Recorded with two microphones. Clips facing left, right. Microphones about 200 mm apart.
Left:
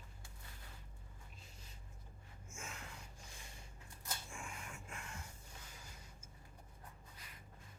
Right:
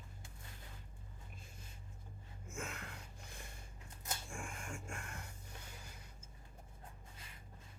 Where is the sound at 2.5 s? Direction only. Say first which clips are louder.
Right 6 dB; 60° right (ahead or behind).